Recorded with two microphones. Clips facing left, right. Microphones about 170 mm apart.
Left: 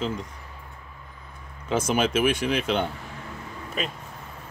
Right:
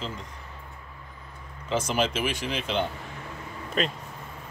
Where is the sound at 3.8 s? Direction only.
5° left (ahead or behind).